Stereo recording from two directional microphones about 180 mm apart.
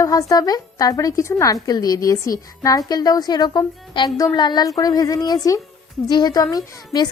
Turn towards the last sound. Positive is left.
turn(degrees=20)  # may be behind; listen again after turning